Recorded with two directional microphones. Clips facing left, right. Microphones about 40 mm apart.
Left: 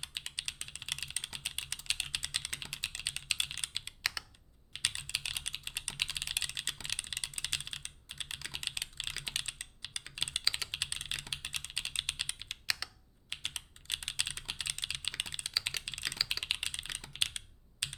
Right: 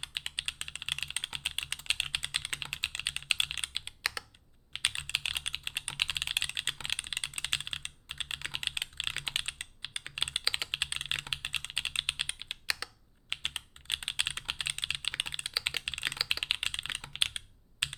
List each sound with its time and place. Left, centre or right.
0.0 s computer keyboard: right
1.0 s typing: right
4.0 s computer keyboard: centre
4.9 s typing: right
10.7 s computer keyboard: right
16.4 s computer keyboard: right
16.6 s computer keyboard: right